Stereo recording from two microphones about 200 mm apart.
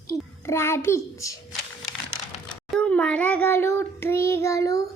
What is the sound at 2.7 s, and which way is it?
Child singing, 5° left (ahead or behind).